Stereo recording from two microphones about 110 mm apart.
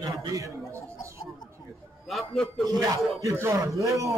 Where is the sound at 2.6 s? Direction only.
30° right (ahead or behind).